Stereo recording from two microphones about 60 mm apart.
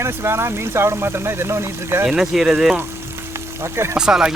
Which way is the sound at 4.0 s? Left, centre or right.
Centre.